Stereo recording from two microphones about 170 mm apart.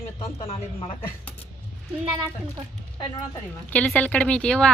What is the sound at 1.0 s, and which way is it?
Speech, 10° left (ahead or behind).